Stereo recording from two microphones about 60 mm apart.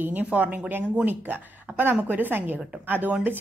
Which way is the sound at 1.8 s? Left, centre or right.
Right.